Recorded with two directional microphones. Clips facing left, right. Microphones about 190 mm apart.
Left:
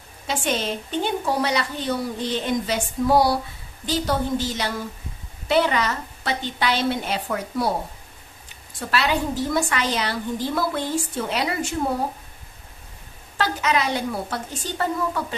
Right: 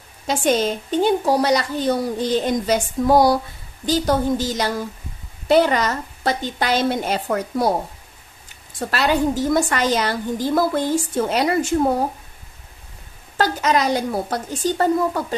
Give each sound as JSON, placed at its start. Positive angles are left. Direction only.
{"t": 0.3, "sound": "a woman's voice", "side_deg": -45}
{"t": 8.7, "sound": "a woman's voice", "side_deg": -45}
{"t": 13.4, "sound": "a woman's voice", "side_deg": -40}